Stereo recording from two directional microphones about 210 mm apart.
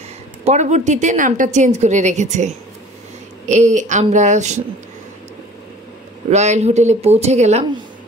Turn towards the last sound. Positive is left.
turn(degrees=-30)  # may be behind; listen again after turning